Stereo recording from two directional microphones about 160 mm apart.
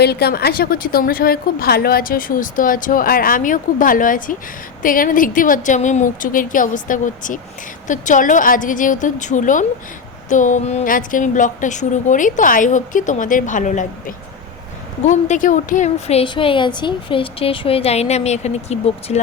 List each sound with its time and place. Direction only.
0.0 s a woman's voice: 85° left; by 13.8 s 50° left (ahead or behind)
15.0 s a woman's voice: 50° left (ahead or behind)